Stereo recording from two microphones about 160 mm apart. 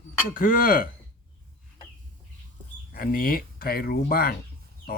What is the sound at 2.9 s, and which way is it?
Speech, 65° left (ahead or behind).